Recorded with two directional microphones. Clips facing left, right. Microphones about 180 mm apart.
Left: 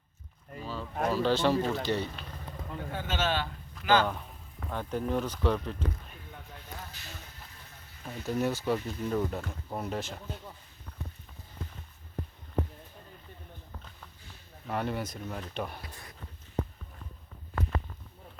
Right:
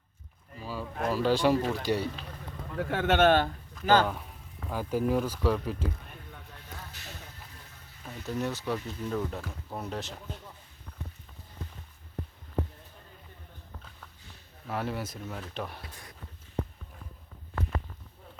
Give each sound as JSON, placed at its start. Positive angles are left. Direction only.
{"t": 0.6, "sound": "speech", "side_deg": -10}
{"t": 2.7, "sound": "a man's voice", "side_deg": -75}
{"t": 4.0, "sound": "speech", "side_deg": -5}
{"t": 8.3, "sound": "speech", "side_deg": 5}
{"t": 14.7, "sound": "speech", "side_deg": -5}